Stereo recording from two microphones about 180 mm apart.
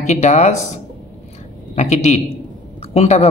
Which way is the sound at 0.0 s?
40° left (ahead or behind).